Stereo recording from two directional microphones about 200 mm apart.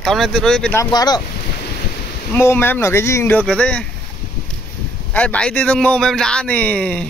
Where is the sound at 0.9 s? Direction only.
20° left (ahead or behind).